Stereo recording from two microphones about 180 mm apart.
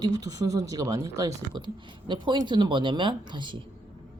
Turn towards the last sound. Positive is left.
turn(degrees=-25)  # may be behind; listen again after turning